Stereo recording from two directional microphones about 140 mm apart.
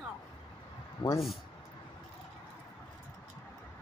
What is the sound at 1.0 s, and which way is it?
Speech, 30° left (ahead or behind).